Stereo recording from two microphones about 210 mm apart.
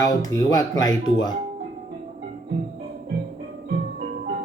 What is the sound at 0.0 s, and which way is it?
Speech, 15° left (ahead or behind).